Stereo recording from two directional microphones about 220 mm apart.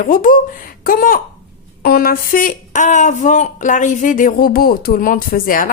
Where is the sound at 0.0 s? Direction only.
40° left (ahead or behind).